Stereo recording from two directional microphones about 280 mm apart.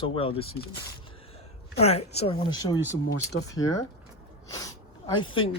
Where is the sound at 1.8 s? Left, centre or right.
Left.